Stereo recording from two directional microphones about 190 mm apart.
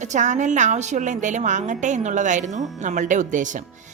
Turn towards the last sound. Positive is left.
turn(degrees=-40)  # may be behind; listen again after turning